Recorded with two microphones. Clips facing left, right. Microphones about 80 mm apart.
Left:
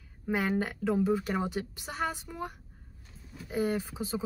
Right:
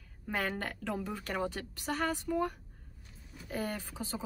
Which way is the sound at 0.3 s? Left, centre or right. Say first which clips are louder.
Left 5 dB; centre.